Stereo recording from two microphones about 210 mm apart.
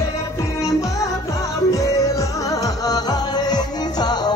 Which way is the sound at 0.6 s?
15° left (ahead or behind).